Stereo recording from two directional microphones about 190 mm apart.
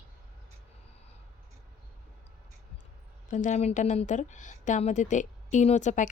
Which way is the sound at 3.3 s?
40° left (ahead or behind).